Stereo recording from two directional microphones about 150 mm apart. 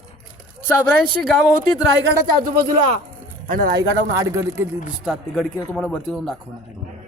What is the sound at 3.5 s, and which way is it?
Speech, 70° right (ahead or behind).